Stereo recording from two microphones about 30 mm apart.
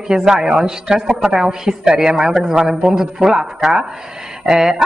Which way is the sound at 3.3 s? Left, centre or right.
Centre.